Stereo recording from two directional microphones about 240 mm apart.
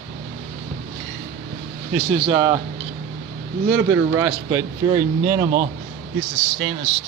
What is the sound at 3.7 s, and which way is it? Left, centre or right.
Speech, right.